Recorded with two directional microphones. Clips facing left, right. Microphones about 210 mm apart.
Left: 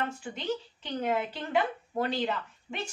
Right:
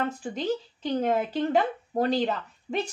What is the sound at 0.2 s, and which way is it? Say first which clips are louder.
Speech: right 5 dB; 40° right (ahead or behind).